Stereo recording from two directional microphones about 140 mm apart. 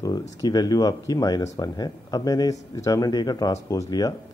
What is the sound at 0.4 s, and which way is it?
Speech, 30° left (ahead or behind).